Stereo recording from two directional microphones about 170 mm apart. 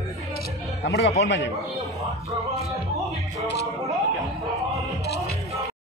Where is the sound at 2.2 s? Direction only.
35° right (ahead or behind).